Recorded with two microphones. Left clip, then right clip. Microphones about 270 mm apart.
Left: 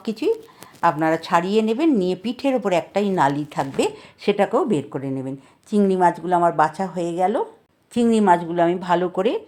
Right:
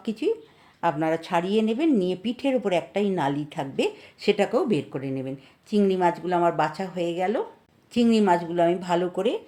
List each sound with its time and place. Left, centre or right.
0.0 s a woman's voice: centre